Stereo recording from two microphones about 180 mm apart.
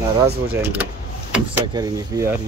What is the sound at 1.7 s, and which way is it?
Speech, 20° right (ahead or behind).